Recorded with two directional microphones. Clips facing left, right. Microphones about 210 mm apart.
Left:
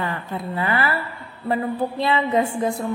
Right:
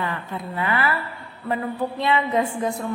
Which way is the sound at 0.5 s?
35° left (ahead or behind).